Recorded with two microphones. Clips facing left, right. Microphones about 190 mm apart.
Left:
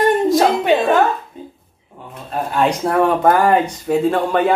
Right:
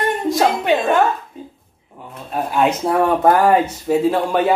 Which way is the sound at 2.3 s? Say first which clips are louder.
Even; 5° right (ahead or behind).